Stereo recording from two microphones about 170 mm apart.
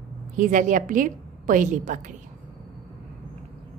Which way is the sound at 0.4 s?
50° right (ahead or behind).